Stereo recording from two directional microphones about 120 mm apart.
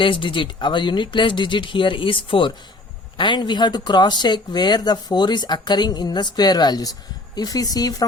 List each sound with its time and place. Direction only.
0.0 s speech: 45° left (ahead or behind)